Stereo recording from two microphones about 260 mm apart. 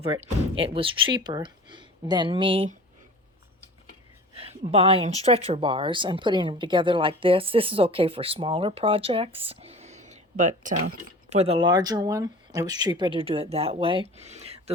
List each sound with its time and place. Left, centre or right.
0.0 s speech: right
4.4 s speech: right